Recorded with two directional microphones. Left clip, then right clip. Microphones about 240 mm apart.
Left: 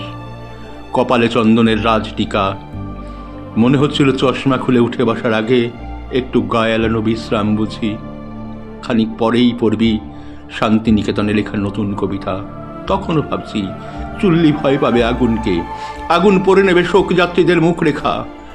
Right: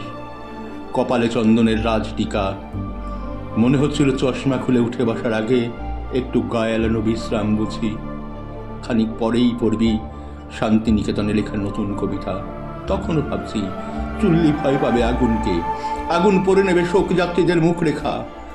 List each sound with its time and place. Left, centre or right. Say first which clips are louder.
0.9 s a man's voice: left 6 dB; centre
3.6 s a man's voice: left 5 dB; centre